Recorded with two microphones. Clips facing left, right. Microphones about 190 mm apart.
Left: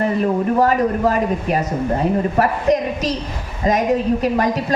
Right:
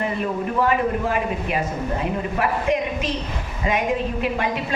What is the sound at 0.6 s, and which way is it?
Speech, 40° left (ahead or behind).